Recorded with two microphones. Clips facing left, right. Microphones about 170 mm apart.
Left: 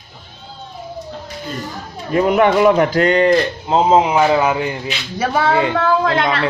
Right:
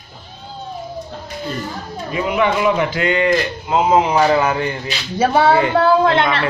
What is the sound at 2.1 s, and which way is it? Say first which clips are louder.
A man's voice: left 5 dB; 50° left (ahead or behind).